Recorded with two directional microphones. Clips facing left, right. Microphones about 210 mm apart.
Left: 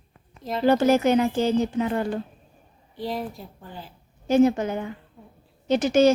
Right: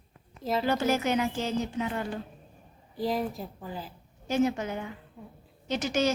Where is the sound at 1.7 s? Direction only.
45° left (ahead or behind).